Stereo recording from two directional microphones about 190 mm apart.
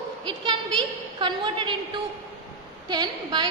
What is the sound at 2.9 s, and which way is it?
Speech, 25° right (ahead or behind).